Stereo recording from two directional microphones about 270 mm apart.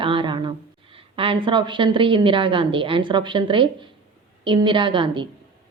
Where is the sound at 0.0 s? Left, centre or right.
Centre.